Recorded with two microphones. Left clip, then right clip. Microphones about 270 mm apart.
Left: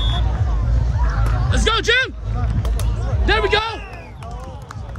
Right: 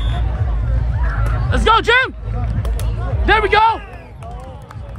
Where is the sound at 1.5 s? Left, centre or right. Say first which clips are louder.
Right 5 dB; centre.